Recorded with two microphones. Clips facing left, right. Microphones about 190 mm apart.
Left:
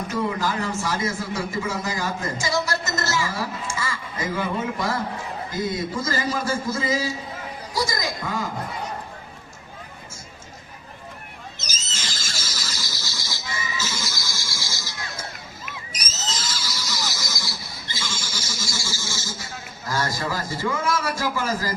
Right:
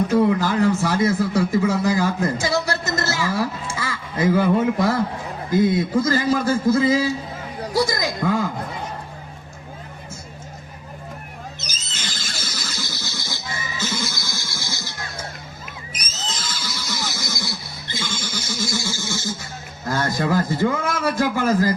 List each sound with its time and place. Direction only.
0.6 s a man's voice: 60° right (ahead or behind)
11.9 s a sound: 60° right (ahead or behind)
15.9 s neigh: 60° right (ahead or behind)
19.9 s a man's voice: 60° right (ahead or behind)